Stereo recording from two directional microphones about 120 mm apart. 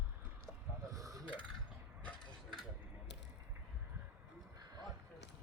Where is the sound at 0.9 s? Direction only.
30° right (ahead or behind).